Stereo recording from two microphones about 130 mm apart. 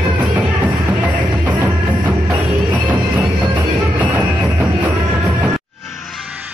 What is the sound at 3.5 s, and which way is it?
Music, 10° right (ahead or behind).